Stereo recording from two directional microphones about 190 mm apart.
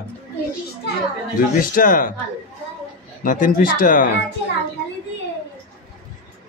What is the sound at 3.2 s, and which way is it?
Speech, 45° left (ahead or behind).